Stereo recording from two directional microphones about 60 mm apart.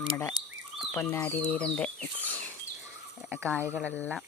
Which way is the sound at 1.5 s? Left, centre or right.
Centre.